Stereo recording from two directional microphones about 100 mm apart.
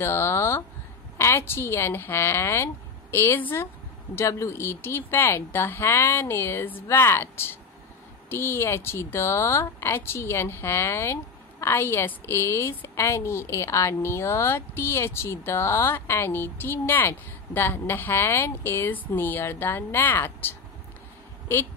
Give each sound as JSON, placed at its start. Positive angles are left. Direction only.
{"t": 0.0, "sound": "a woman's voice", "side_deg": 25}